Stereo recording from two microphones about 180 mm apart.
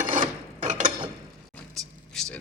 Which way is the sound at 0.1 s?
45° right (ahead or behind).